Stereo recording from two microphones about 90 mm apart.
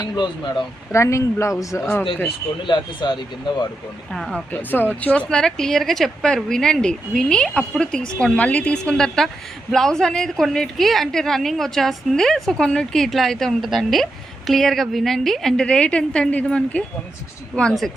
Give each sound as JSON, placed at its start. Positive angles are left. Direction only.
{"t": 0.2, "sound": "speech", "side_deg": 60}
{"t": 0.9, "sound": "speech", "side_deg": 35}
{"t": 2.6, "sound": "speech", "side_deg": 60}
{"t": 4.1, "sound": "speech", "side_deg": 5}
{"t": 4.5, "sound": "a woman's voice", "side_deg": 20}